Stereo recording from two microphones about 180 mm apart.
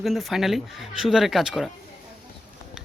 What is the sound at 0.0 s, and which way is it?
Speech, centre (ahead or behind).